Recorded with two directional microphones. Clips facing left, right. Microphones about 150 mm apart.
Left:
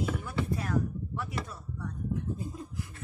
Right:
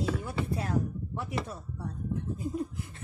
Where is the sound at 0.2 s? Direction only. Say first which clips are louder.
Even; 25° right (ahead or behind).